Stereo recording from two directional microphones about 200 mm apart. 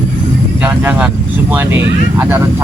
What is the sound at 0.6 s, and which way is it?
Speech, 10° right (ahead or behind).